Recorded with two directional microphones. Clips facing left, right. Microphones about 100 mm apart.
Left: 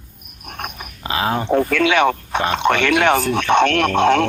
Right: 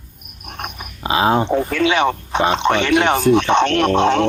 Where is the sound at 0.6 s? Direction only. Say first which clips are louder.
Right 2 dB; 20° right (ahead or behind).